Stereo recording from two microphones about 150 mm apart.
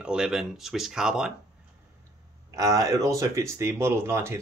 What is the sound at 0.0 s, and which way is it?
Speech, 5° right (ahead or behind).